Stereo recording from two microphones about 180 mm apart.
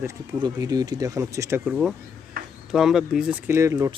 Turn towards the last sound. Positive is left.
turn(degrees=-15)  # may be behind; listen again after turning